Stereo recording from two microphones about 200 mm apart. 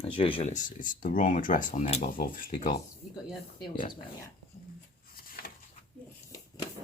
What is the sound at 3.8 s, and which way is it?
Speech, 45° left (ahead or behind).